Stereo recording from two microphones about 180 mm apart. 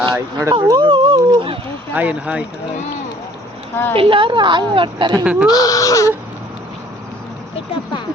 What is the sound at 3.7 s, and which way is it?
Speech, 10° left (ahead or behind).